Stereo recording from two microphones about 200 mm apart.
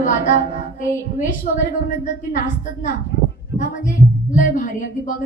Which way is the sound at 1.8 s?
40° left (ahead or behind).